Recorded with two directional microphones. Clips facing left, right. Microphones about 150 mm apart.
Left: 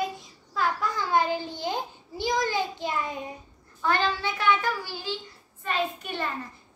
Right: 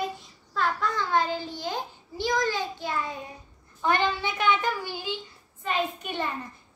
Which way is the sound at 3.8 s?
20° right (ahead or behind).